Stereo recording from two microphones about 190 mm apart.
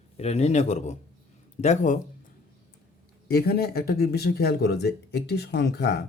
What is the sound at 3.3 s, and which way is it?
Speech, 55° left (ahead or behind).